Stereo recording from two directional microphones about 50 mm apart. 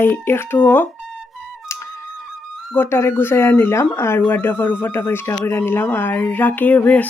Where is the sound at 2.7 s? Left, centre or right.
Left.